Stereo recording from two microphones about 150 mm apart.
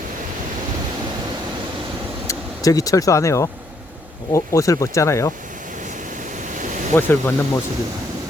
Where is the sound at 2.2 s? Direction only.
20° left (ahead or behind).